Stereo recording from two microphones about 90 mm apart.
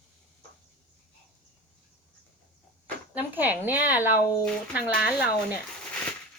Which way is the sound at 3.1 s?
20° right (ahead or behind).